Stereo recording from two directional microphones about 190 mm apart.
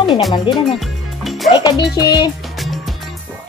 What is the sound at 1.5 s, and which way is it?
Speech, 20° left (ahead or behind).